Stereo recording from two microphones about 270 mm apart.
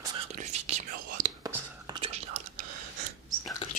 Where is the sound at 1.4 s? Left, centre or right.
Centre.